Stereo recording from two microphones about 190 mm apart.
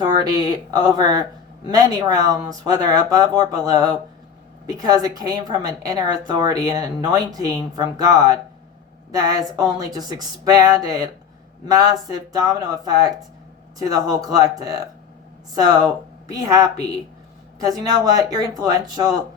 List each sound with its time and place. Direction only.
0.0 s a woman's voice: 20° right (ahead or behind)